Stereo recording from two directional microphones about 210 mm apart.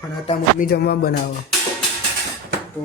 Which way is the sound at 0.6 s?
45° left (ahead or behind).